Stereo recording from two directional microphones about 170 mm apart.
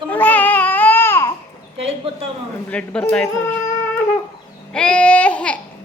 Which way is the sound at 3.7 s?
15° left (ahead or behind).